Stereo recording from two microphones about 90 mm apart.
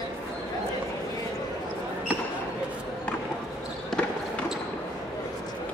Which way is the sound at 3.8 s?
10° left (ahead or behind).